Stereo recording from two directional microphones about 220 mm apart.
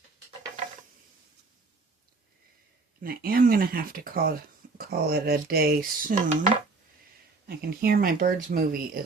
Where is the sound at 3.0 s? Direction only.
40° right (ahead or behind).